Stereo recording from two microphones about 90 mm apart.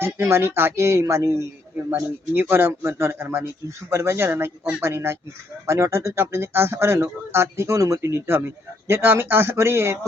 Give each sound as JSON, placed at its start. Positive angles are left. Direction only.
{"t": 0.0, "sound": "speech", "side_deg": -30}
{"t": 1.9, "sound": "speech", "side_deg": -25}